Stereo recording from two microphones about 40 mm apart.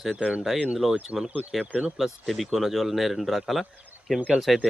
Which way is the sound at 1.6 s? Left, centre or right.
Right.